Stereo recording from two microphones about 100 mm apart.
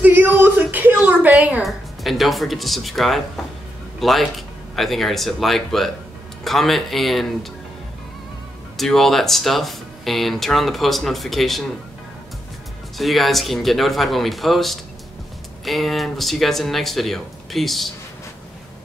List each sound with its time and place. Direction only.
0.0 s a sound: 20° right (ahead or behind)
1.6 s speech: centre (ahead or behind)
8.7 s speech: centre (ahead or behind)
12.9 s speech: centre (ahead or behind)